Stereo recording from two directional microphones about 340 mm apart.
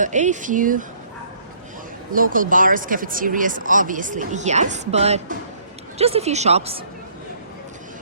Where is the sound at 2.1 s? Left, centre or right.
Right.